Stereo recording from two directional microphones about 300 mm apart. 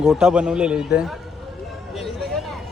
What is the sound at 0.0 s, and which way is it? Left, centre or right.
Speech, centre.